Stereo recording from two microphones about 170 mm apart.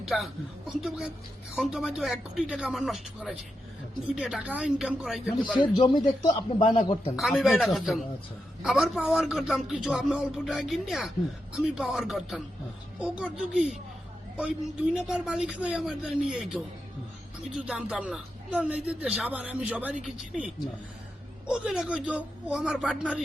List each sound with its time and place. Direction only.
0.0 s a man's voice: centre (ahead or behind)
5.5 s speech: 30° left (ahead or behind)
7.2 s a man's voice: centre (ahead or behind)